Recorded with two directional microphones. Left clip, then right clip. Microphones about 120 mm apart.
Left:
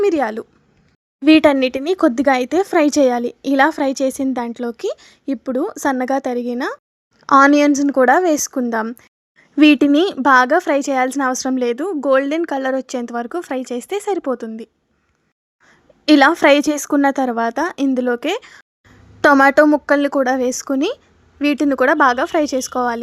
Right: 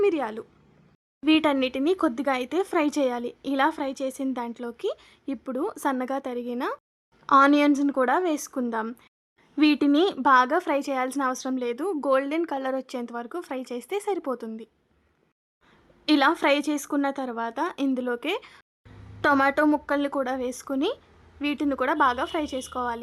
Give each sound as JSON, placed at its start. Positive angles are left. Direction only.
{"t": 0.0, "sound": "a woman's voice", "side_deg": 40}
{"t": 11.9, "sound": "a woman's voice", "side_deg": 30}